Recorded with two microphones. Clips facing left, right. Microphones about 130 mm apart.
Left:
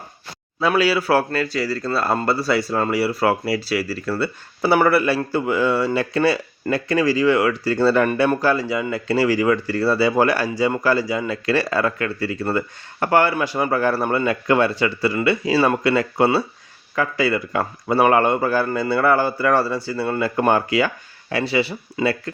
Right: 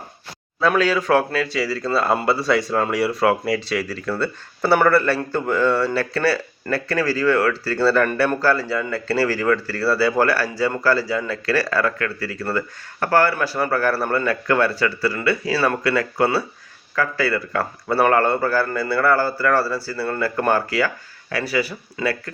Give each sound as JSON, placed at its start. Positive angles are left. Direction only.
{"t": 0.6, "sound": "a man's voice", "side_deg": 10}